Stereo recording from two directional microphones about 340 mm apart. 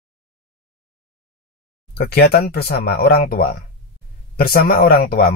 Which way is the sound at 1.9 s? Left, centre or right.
Left.